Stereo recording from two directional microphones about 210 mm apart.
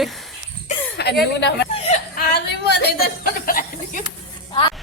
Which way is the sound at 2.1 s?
50° left (ahead or behind).